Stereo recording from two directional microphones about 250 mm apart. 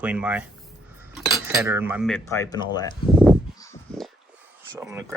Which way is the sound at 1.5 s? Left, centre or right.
Centre.